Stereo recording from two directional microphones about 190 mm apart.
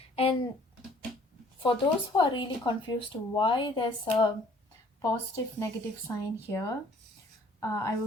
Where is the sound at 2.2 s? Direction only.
25° left (ahead or behind).